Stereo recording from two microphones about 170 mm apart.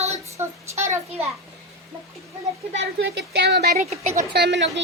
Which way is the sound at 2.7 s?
85° right.